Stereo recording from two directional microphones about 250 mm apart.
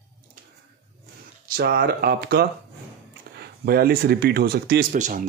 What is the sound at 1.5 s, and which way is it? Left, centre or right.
Speech, right.